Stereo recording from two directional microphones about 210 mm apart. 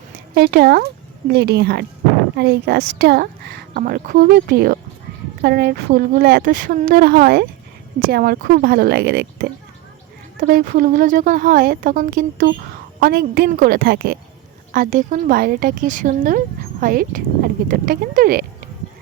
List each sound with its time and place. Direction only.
0.3 s speech: 50° right (ahead or behind)